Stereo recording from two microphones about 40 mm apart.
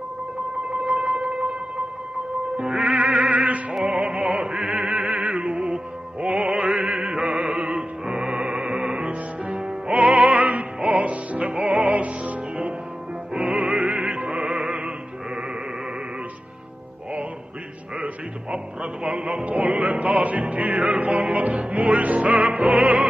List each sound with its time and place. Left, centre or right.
0.7 s music: right
18.0 s music: right
22.5 s opera: right